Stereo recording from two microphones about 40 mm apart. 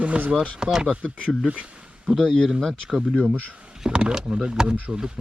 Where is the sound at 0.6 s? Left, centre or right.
Centre.